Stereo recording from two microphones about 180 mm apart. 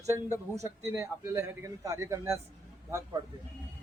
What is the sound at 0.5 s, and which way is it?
A man's voice, 15° right (ahead or behind).